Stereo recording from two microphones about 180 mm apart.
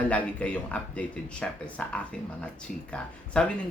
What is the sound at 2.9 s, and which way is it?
Speech, 5° left (ahead or behind).